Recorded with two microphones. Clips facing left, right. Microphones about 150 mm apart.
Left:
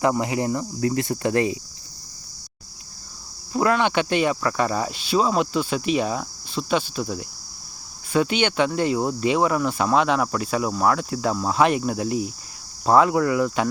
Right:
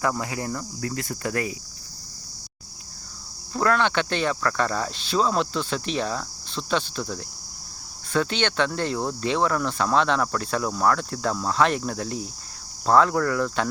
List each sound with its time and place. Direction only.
0.0 s cricket: 20° left (ahead or behind)
3.5 s speech: 10° left (ahead or behind)